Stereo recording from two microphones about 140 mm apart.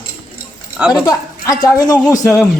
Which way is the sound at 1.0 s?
25° left (ahead or behind).